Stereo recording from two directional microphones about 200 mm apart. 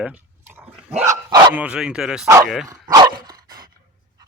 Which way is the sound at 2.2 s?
15° right (ahead or behind).